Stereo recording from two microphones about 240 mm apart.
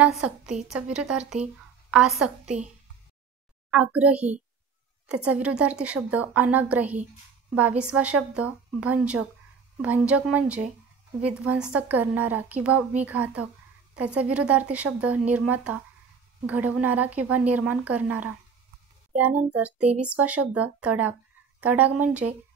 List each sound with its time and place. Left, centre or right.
0.0 s a woman's voice: centre
3.7 s a woman's voice: centre
22.2 s speech: right